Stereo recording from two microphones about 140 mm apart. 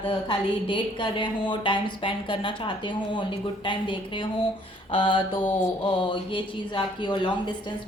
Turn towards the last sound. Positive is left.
turn(degrees=35)  # may be behind; listen again after turning